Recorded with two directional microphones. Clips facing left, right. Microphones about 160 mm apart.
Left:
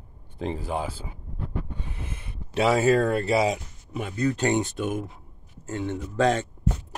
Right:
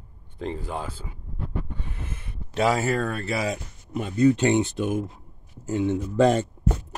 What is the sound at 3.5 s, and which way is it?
Speech, 70° left (ahead or behind).